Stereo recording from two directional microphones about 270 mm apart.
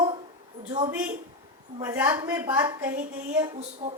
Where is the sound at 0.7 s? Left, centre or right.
Centre.